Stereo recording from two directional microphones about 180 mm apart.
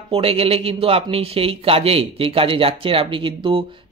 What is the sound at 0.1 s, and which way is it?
A man's voice, 30° right (ahead or behind).